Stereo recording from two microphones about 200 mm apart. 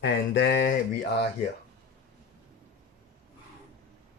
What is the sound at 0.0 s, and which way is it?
Mantra, 60° left (ahead or behind).